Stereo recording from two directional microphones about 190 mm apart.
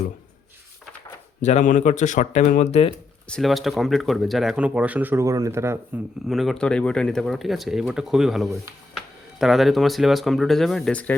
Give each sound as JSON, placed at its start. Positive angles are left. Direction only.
{"t": 1.4, "sound": "speech", "side_deg": 40}
{"t": 3.2, "sound": "speech", "side_deg": 0}
{"t": 6.2, "sound": "speech", "side_deg": 0}